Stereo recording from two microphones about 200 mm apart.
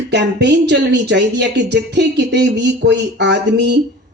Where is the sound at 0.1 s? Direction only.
60° right (ahead or behind).